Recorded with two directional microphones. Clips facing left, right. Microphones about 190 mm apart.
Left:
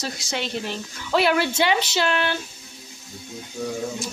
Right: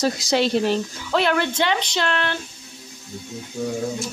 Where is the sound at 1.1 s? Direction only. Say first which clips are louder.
Even; 5° left (ahead or behind).